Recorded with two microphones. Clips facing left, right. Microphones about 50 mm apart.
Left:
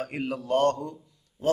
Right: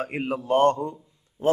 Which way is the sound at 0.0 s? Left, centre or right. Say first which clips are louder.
Right 3 dB; right.